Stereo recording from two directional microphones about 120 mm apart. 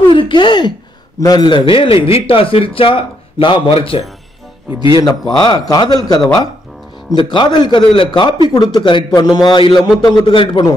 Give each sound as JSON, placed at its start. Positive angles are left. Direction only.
{"t": 0.0, "sound": "a man's voice", "side_deg": 45}
{"t": 5.0, "sound": "a man's voice", "side_deg": 35}